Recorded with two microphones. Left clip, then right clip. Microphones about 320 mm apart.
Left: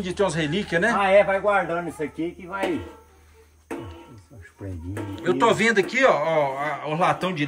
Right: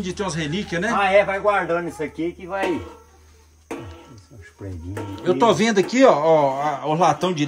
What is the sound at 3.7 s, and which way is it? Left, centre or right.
Music, centre.